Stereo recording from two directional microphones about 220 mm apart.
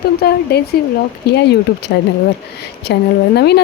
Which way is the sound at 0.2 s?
45° left (ahead or behind).